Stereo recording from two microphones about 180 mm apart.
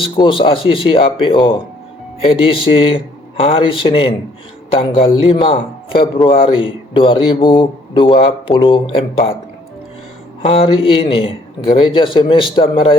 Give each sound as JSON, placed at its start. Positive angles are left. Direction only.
{"t": 0.0, "sound": "a man's voice", "side_deg": 30}
{"t": 5.3, "sound": "a man's voice", "side_deg": 30}
{"t": 10.4, "sound": "a man's voice", "side_deg": 30}